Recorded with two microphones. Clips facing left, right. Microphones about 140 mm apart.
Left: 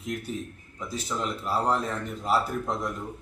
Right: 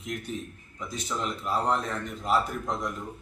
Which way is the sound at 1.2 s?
5° left (ahead or behind).